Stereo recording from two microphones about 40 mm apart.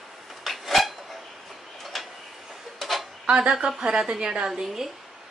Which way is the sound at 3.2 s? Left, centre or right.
Right.